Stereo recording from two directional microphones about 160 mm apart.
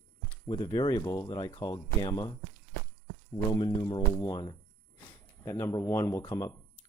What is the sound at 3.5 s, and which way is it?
Speech, 30° left (ahead or behind).